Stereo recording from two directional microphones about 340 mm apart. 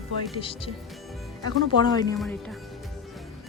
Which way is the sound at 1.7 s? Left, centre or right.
Centre.